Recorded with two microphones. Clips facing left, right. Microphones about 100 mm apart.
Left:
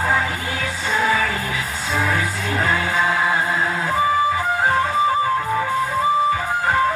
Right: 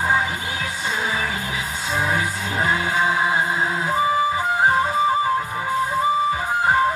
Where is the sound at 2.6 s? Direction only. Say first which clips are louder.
Even; 20° right (ahead or behind).